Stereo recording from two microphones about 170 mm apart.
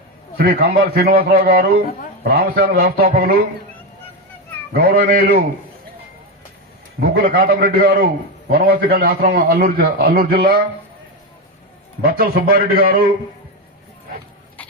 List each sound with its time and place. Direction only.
0.3 s a man's voice: 65° right (ahead or behind)
4.8 s a man's voice: 60° right (ahead or behind)
7.0 s a man's voice: 60° right (ahead or behind)
12.1 s a man's voice: 60° right (ahead or behind)